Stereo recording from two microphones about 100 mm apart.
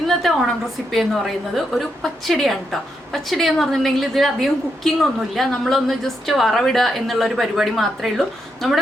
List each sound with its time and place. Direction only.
0.2 s a woman's voice: centre (ahead or behind)